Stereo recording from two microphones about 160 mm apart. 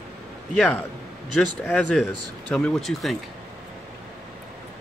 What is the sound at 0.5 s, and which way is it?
Speech, 5° left (ahead or behind).